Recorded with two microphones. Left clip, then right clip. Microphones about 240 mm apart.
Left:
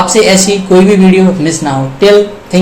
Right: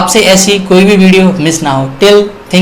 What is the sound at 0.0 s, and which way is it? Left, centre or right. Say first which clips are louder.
Speech: right 1 dB; centre.